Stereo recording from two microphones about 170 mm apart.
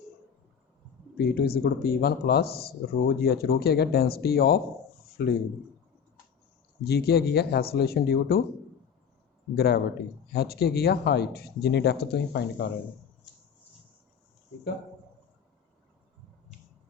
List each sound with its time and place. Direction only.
1.2 s speech: 65° left (ahead or behind)
6.8 s speech: 70° left (ahead or behind)
9.6 s speech: 65° left (ahead or behind)